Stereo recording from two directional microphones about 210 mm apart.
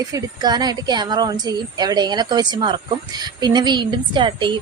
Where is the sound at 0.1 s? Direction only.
20° right (ahead or behind).